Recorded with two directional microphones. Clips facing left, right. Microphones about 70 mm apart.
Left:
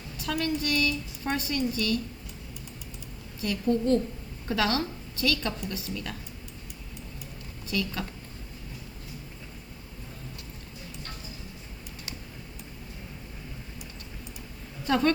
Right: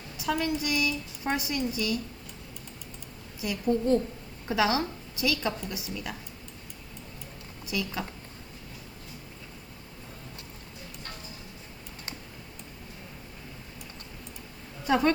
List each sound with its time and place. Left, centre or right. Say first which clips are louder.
0.2 s a woman's voice: right 1 dB; centre
3.4 s a woman's voice: left 1 dB; centre
7.7 s a woman's voice: left 1 dB; centre
14.8 s a woman's voice: even; centre